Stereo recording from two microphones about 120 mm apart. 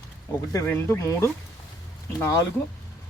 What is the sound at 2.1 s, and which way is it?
Speech, 25° left (ahead or behind).